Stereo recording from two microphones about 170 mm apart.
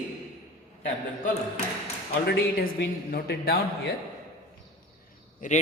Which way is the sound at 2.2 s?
70° left (ahead or behind).